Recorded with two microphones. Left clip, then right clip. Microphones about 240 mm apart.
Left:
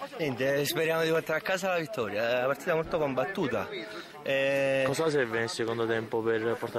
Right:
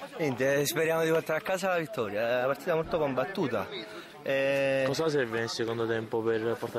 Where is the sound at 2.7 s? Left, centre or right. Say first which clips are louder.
Even; right.